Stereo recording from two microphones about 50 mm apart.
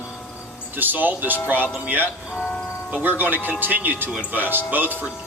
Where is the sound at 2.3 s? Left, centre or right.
Left.